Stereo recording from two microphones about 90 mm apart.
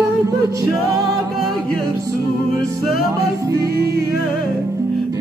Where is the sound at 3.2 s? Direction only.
35° right (ahead or behind).